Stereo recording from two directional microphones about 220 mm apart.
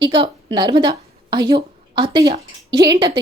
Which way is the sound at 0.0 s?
20° right (ahead or behind).